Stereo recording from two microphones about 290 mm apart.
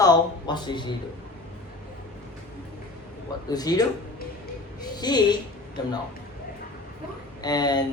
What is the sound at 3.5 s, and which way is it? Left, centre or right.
Speech, centre.